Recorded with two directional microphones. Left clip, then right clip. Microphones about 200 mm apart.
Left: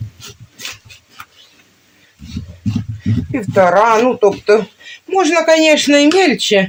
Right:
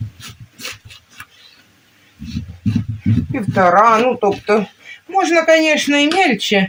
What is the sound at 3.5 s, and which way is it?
Speech, 35° left (ahead or behind).